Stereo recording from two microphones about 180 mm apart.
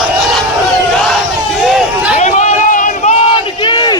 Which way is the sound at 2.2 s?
40° left (ahead or behind).